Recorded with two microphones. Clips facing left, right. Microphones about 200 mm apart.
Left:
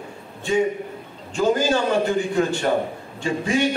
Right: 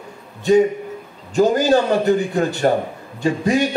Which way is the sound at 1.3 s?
40° right (ahead or behind).